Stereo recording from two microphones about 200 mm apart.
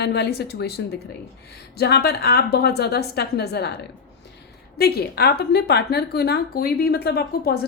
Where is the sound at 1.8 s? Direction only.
50° left (ahead or behind).